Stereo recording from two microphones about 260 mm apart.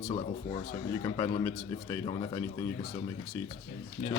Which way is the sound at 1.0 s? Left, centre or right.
Centre.